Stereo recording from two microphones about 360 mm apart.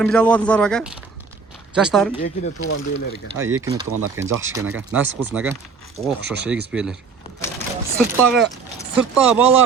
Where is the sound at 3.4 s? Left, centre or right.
Right.